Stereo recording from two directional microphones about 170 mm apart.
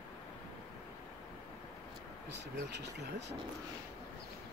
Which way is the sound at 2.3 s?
90° right.